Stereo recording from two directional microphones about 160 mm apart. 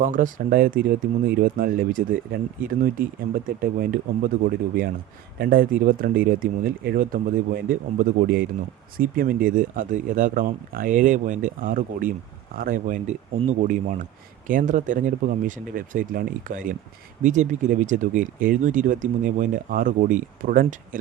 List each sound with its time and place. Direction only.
0.0 s speech: 55° right (ahead or behind)